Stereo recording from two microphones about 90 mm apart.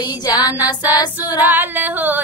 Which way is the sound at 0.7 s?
45° left (ahead or behind).